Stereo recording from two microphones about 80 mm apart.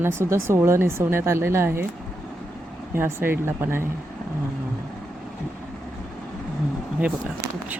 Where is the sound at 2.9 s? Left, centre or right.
Right.